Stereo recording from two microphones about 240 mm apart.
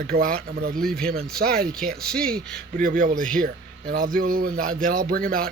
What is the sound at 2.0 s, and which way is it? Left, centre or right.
Speech, centre.